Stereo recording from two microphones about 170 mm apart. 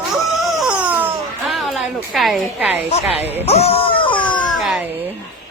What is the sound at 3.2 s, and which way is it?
Speech, 10° right (ahead or behind).